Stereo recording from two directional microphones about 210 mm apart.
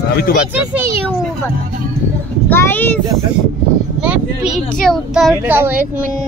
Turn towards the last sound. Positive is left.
turn(degrees=-10)  # may be behind; listen again after turning